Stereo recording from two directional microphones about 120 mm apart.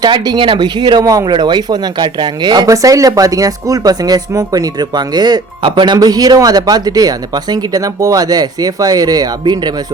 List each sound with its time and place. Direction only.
0.0 s speech: 40° right (ahead or behind)